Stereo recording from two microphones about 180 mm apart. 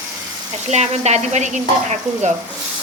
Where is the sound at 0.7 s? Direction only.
40° right (ahead or behind).